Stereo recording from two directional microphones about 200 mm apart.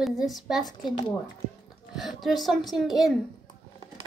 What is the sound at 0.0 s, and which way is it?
Speech, centre (ahead or behind).